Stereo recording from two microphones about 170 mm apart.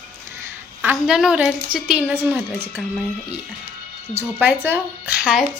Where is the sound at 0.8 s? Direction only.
5° right (ahead or behind).